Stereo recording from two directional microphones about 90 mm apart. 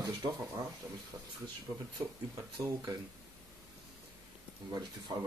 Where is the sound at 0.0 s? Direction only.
40° right (ahead or behind).